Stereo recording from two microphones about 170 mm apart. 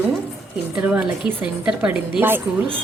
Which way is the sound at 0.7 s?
5° right (ahead or behind).